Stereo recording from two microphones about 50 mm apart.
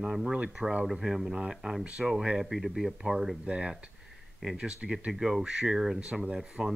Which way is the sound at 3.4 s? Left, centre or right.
Right.